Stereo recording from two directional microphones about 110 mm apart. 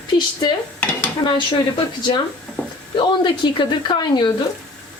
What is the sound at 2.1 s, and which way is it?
Speech, 40° left (ahead or behind).